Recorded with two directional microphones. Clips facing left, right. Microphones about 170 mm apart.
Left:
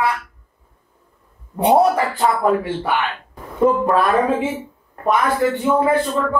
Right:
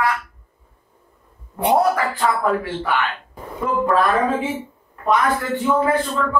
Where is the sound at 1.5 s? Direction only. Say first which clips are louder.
Left 3 dB; 20° left (ahead or behind).